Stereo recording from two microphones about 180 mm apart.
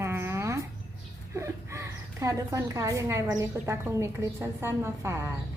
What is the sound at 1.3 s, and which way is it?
A woman's voice, 15° right (ahead or behind).